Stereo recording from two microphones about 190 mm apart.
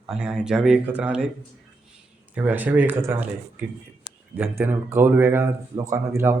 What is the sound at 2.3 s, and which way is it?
Speech, 10° right (ahead or behind).